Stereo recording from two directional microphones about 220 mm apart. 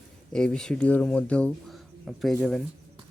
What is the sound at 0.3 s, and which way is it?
Speech, 5° left (ahead or behind).